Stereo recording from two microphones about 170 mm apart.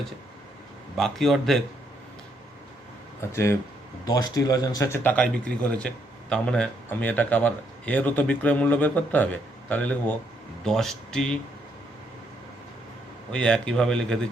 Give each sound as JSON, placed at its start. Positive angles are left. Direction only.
{"t": 0.9, "sound": "speech", "side_deg": 0}
{"t": 3.2, "sound": "speech", "side_deg": 15}
{"t": 13.3, "sound": "speech", "side_deg": 5}